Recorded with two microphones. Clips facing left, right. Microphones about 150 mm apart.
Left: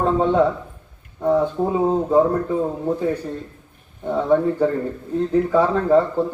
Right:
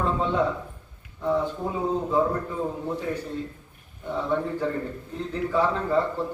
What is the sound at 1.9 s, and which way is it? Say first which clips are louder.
Speech: left 5 dB; 45° left (ahead or behind).